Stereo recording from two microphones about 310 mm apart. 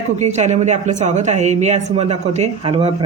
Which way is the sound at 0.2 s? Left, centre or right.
Right.